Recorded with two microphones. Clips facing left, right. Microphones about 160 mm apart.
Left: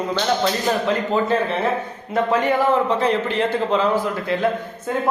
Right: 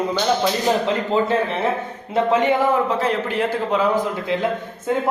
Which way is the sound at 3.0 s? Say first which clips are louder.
Left 1 dB; 5° right (ahead or behind).